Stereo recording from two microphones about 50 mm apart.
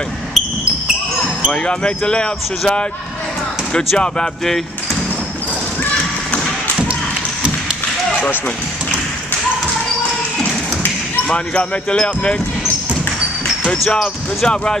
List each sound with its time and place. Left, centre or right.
1.5 s speech: centre
4.0 s speech: centre
11.2 s speech: left
13.9 s speech: centre